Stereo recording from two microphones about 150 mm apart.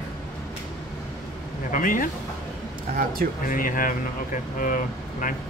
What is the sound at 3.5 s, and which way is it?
Speech, 65° left (ahead or behind).